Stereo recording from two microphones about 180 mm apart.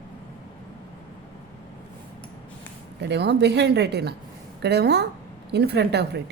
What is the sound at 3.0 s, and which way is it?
A woman's voice, 70° right (ahead or behind).